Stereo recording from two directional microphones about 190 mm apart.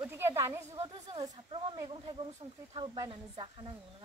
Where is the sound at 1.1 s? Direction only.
25° right (ahead or behind).